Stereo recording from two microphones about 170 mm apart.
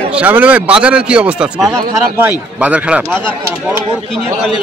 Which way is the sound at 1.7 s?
20° right (ahead or behind).